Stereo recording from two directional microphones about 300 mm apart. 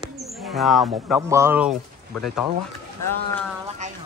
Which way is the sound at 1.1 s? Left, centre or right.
Centre.